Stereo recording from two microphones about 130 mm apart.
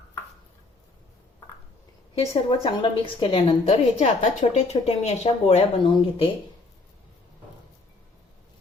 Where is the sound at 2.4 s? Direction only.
40° left (ahead or behind).